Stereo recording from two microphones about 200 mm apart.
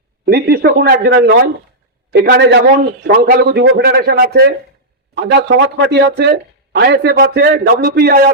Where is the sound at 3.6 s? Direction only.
80° right.